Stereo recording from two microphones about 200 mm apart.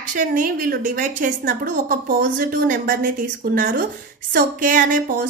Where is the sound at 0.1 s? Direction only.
40° right (ahead or behind).